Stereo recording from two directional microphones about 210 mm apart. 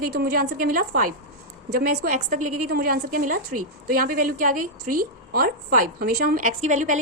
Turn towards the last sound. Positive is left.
turn(degrees=-35)  # may be behind; listen again after turning